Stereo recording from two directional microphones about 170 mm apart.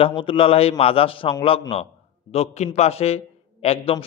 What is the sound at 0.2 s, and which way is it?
A man's voice, 30° left (ahead or behind).